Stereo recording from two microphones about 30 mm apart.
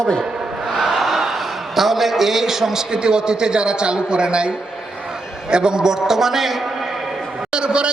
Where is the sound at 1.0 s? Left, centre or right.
Centre.